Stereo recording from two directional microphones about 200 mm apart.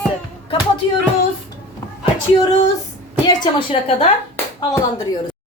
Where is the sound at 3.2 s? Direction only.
20° left (ahead or behind).